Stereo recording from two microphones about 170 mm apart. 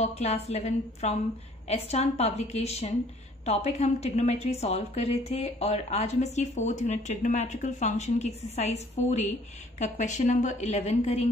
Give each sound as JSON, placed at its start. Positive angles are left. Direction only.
{"t": 0.0, "sound": "a woman's voice", "side_deg": 40}